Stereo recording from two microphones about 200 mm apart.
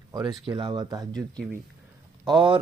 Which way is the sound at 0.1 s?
20° right (ahead or behind).